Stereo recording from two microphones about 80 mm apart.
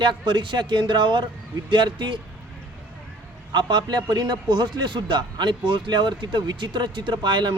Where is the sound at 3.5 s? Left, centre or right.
Right.